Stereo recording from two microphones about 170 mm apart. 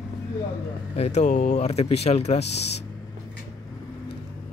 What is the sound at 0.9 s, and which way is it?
A man's voice, 40° left (ahead or behind).